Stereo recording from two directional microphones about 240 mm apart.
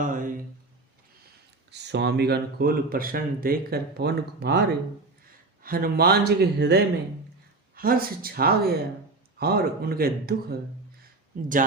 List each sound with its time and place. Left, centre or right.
0.0 s a sound: right
1.7 s speech: right
5.6 s speech: right